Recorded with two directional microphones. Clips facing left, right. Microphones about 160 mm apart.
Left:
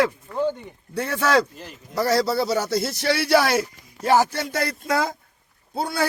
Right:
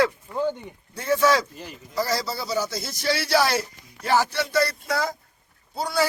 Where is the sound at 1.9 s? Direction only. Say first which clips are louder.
Left 6 dB; 65° left (ahead or behind).